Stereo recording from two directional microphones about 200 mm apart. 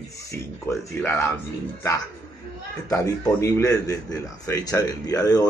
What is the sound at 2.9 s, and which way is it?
A man's voice, 15° left (ahead or behind).